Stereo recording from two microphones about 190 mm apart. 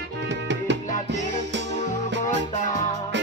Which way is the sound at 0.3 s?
70° right (ahead or behind).